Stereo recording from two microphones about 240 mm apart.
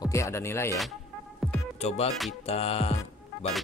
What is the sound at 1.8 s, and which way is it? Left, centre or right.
Speech, left.